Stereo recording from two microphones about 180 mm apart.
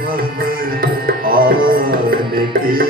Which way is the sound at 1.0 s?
55° right (ahead or behind).